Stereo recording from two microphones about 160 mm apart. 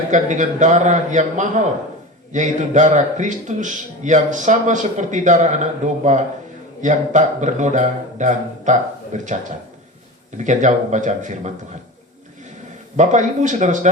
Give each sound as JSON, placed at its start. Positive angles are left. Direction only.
{"t": 0.1, "sound": "speech", "side_deg": -50}
{"t": 13.0, "sound": "speech", "side_deg": -50}